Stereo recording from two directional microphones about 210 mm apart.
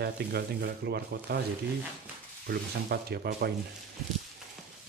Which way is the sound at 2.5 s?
50° right (ahead or behind).